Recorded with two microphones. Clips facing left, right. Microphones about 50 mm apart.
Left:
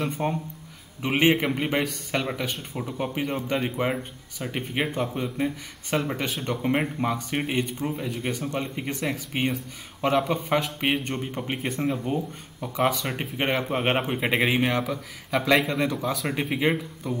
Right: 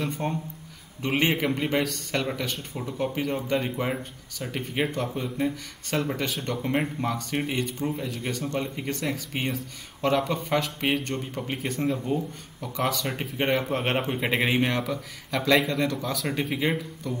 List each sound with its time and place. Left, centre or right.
0.0 s speech: centre
11.8 s speech: centre
13.7 s speech: centre